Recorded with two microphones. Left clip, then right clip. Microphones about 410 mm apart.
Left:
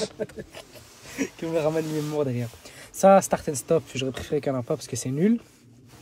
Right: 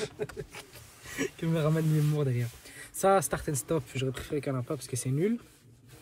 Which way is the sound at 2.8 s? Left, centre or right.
Centre.